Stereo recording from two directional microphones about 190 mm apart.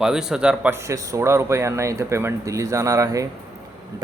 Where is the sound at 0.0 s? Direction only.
5° right (ahead or behind).